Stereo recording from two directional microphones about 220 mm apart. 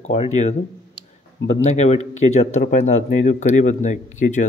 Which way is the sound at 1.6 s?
30° left (ahead or behind).